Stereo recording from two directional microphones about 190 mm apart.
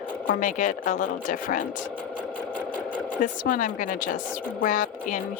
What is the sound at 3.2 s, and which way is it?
Speech, 45° left (ahead or behind).